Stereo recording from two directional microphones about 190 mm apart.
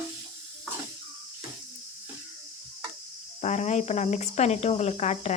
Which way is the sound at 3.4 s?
40° left (ahead or behind).